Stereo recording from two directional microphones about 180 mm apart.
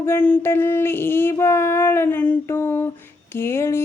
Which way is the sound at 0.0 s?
10° left (ahead or behind).